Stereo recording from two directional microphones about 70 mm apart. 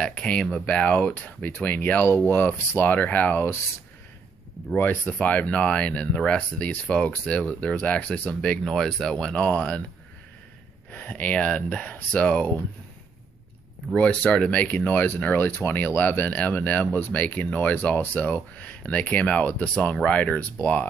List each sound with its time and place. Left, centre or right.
0.0 s speech: centre
4.7 s speech: left
8.6 s speech: centre
10.9 s speech: left
13.9 s speech: centre